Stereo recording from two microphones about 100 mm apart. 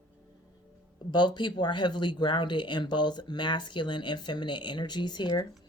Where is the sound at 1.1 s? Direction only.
50° left (ahead or behind).